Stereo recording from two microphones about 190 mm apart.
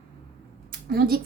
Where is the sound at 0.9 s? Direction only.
55° right (ahead or behind).